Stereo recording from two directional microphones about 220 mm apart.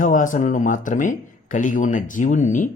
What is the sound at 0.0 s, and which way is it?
Speech, 35° left (ahead or behind).